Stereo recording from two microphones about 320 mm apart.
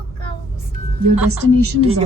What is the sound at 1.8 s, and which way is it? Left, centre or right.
Speech, centre.